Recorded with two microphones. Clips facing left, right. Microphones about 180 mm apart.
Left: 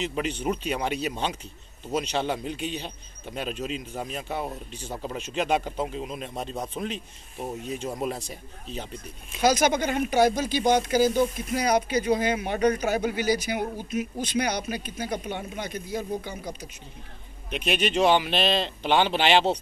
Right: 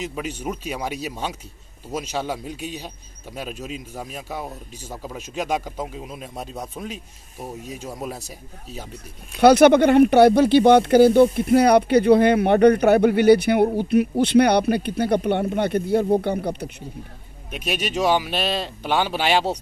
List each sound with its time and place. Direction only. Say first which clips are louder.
0.1 s speech: left 1 dB; 10° right (ahead or behind)
8.9 s speech: right 1 dB; 65° right (ahead or behind)
17.6 s speech: even; 10° right (ahead or behind)